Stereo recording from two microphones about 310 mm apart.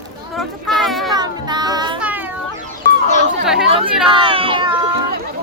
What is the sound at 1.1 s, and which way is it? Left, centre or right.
Child singing, centre.